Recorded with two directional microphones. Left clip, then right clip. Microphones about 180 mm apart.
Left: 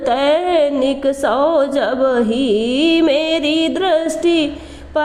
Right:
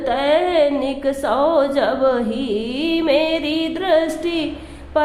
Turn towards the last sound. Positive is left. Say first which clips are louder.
# left 3 dB
turn(degrees=30)  # may be behind; listen again after turning